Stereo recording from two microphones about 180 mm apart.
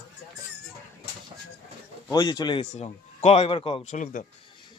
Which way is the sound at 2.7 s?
35° left (ahead or behind).